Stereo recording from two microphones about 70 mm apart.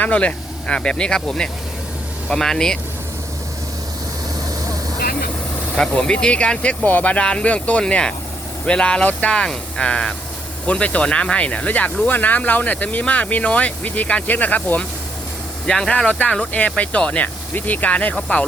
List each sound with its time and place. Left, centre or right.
0.0 s speech: centre
5.7 s speech: centre
15.6 s speech: centre